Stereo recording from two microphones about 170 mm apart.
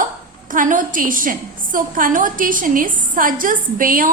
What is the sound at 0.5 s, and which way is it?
A woman's voice, 50° right (ahead or behind).